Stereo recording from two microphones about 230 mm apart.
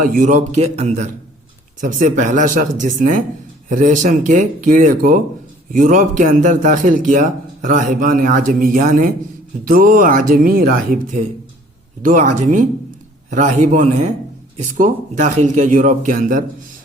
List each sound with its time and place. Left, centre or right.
0.0 s a man's voice: right